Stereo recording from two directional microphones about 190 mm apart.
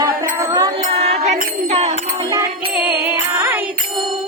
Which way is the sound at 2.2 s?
20° right (ahead or behind).